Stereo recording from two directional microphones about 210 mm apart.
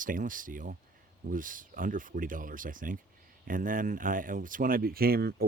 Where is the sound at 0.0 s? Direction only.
40° right (ahead or behind).